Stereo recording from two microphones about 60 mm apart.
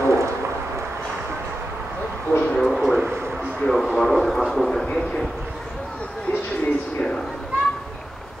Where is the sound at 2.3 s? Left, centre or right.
Centre.